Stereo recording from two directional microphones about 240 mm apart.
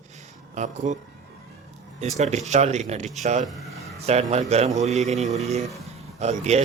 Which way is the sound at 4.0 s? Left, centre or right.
Right.